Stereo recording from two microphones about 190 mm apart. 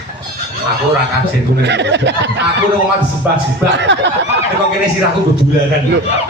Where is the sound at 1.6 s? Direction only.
65° right (ahead or behind).